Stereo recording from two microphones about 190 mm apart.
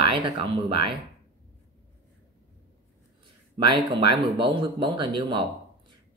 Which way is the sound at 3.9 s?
25° right (ahead or behind).